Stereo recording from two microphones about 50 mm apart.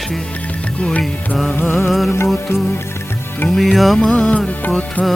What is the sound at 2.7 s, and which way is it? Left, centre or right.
Music, left.